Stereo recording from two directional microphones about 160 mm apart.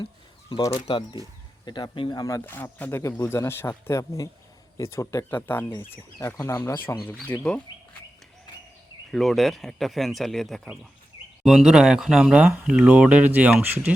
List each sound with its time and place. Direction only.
0.5 s speech: 20° left (ahead or behind)
0.9 s speech: 30° left (ahead or behind); by 7.5 s 15° left (ahead or behind)
9.1 s speech: centre (ahead or behind)